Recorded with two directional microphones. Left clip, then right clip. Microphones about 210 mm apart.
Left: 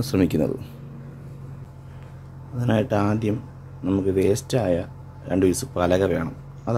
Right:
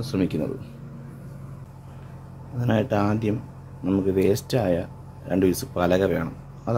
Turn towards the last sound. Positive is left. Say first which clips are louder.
# even
turn(degrees=5)  # may be behind; listen again after turning